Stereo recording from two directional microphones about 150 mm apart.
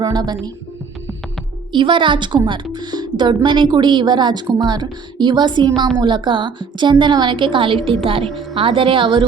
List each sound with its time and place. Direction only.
0.0 s speech: 25° right (ahead or behind)
1.7 s a woman's voice: 35° right (ahead or behind)